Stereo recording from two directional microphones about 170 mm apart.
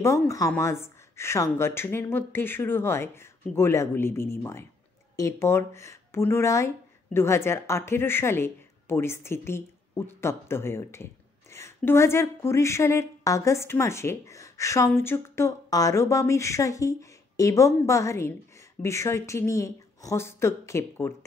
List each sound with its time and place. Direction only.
0.0 s speech: 15° left (ahead or behind)